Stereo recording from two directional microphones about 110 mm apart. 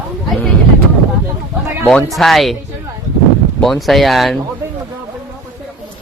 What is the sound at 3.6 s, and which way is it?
Speech, centre (ahead or behind).